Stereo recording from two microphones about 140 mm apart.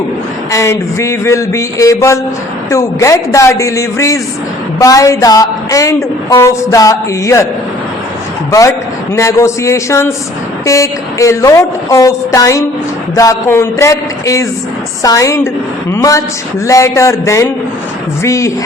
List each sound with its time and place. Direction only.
0.5 s a woman's voice: 20° left (ahead or behind)
8.4 s a man's voice: 20° left (ahead or behind)